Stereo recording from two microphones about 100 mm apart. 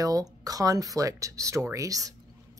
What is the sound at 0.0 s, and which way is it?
A woman's voice, 35° right (ahead or behind).